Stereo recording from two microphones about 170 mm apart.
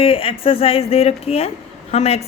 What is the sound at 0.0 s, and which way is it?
Speech, 35° left (ahead or behind).